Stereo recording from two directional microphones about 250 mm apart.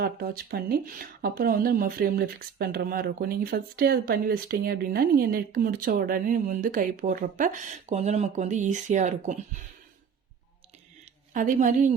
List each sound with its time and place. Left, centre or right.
0.0 s speech: right
11.3 s speech: right